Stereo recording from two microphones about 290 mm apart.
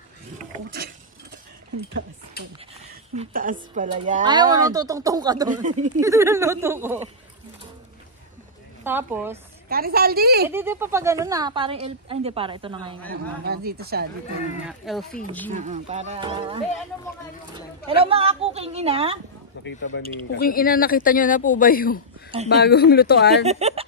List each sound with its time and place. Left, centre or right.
3.2 s speech: right
5.5 s speech: right
5.9 s speech: centre
8.8 s speech: centre
9.7 s speech: right
10.5 s speech: centre
13.1 s speech: right
14.7 s speech: centre
15.5 s speech: right
17.8 s speech: centre
19.6 s speech: left
23.4 s speech: right